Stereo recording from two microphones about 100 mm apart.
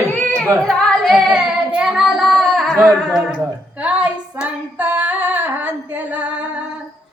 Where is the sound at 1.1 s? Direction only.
5° right (ahead or behind).